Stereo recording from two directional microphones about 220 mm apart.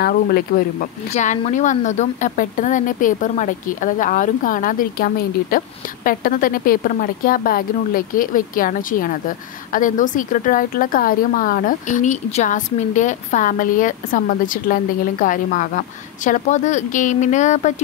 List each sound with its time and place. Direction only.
0.0 s speech: 45° left (ahead or behind)
1.1 s a woman's voice: 30° left (ahead or behind)